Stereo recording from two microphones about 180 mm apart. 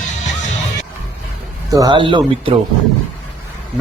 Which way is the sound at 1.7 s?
25° right (ahead or behind).